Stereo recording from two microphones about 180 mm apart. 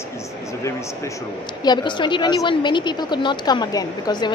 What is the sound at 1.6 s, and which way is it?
A woman's voice, 25° left (ahead or behind).